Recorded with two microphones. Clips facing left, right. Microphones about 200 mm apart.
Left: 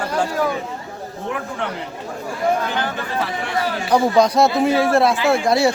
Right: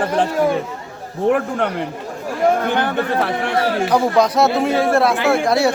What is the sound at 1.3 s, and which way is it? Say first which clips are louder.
A man's voice: right 8 dB; 50° right (ahead or behind).